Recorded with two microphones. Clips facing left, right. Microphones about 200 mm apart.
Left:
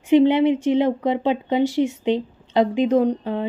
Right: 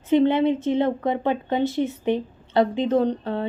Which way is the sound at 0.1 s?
15° left (ahead or behind).